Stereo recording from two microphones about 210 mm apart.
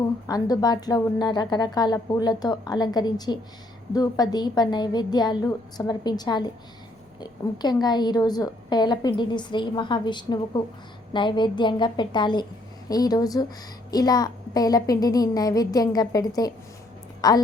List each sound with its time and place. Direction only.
0.3 s a woman's voice: 20° left (ahead or behind)